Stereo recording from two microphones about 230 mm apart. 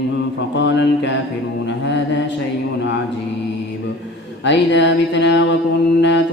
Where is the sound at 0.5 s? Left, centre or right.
Left.